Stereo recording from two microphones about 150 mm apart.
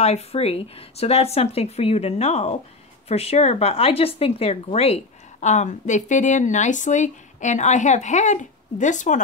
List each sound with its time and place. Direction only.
0.0 s speech: 45° left (ahead or behind)